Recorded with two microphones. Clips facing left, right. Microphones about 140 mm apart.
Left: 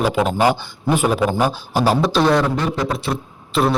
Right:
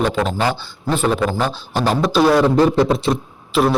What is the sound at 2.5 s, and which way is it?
Speech, 30° right (ahead or behind).